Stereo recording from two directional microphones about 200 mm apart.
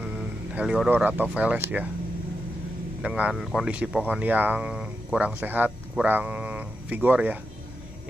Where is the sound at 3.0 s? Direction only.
5° right (ahead or behind).